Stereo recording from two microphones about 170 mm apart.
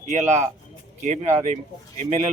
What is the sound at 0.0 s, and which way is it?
Speech, 45° right (ahead or behind).